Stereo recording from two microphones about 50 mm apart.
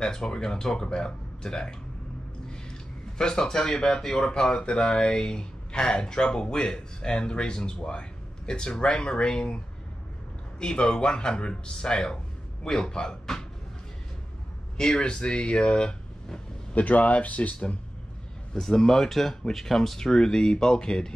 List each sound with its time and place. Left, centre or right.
0.0 s speech: centre
3.2 s speech: centre
10.6 s speech: centre
15.0 s speech: centre
16.7 s speech: left
18.5 s speech: centre